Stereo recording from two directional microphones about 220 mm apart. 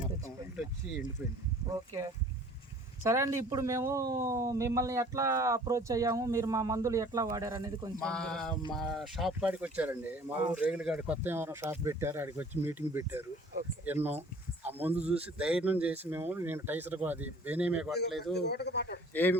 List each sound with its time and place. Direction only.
1.7 s speech: 15° right (ahead or behind)
7.9 s speech: 5° left (ahead or behind)
18.3 s speech: 50° left (ahead or behind)
19.1 s speech: 10° left (ahead or behind)